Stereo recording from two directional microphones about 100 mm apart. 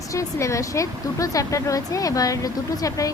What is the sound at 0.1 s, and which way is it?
Speech, 30° left (ahead or behind).